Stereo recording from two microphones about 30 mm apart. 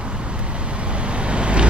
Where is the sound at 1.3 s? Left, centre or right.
Right.